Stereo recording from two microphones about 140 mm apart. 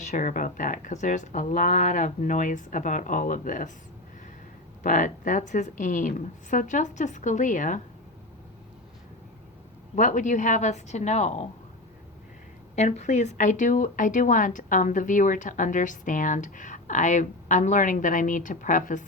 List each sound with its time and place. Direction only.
0.0 s speech: 65° left (ahead or behind)
4.8 s a woman's voice: 65° left (ahead or behind)
9.9 s a woman's voice: 65° left (ahead or behind)
12.7 s speech: 55° left (ahead or behind)